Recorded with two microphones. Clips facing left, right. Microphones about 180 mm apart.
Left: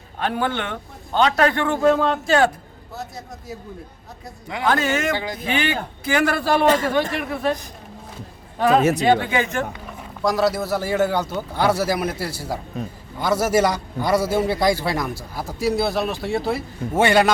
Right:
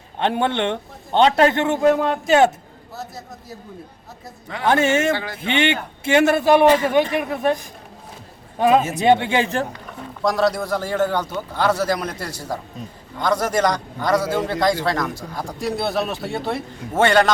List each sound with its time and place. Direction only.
0.2 s a man's voice: 25° right (ahead or behind)
4.6 s a man's voice: 25° right (ahead or behind)
5.1 s a man's voice: 15° left (ahead or behind)
5.5 s a man's voice: 25° right (ahead or behind)
8.5 s a man's voice: 15° right (ahead or behind)
8.8 s speech: 70° left (ahead or behind)
9.0 s a man's voice: 25° right (ahead or behind)
10.2 s a man's voice: centre (ahead or behind)
12.7 s a man's voice: 60° left (ahead or behind)
13.1 s a man's voice: 5° left (ahead or behind)